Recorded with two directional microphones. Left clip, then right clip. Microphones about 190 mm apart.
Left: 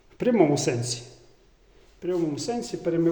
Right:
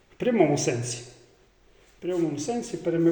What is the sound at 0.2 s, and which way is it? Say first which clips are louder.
Speech: left 1 dB; 10° left (ahead or behind).